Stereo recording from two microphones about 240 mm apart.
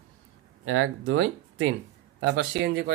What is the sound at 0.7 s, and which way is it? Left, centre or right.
Speech, right.